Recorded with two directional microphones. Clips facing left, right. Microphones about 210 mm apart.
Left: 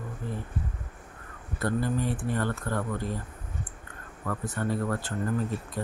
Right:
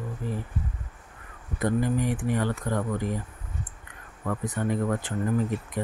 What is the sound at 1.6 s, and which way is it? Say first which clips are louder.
Speech: right 3 dB; 15° right (ahead or behind).